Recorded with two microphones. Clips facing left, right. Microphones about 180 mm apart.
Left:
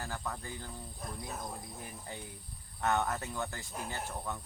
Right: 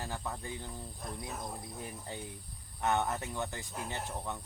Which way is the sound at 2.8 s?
20° right (ahead or behind).